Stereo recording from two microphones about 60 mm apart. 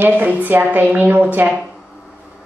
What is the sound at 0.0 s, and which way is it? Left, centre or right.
A woman's voice, right.